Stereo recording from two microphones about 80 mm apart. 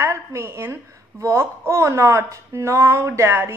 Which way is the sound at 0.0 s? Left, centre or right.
Right.